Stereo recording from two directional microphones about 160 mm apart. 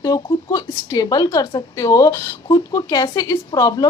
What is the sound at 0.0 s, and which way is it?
A woman's voice, 20° left (ahead or behind).